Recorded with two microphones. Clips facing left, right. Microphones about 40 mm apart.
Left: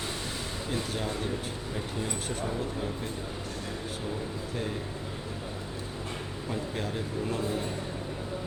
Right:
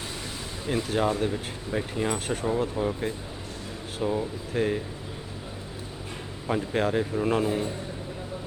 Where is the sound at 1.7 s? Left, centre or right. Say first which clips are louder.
Right 8 dB; right.